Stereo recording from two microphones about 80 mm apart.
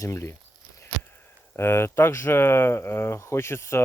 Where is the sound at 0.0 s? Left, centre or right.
Left.